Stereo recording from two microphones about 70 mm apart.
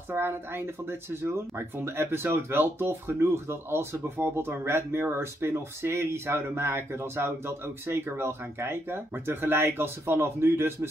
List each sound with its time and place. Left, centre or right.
0.1 s speech: right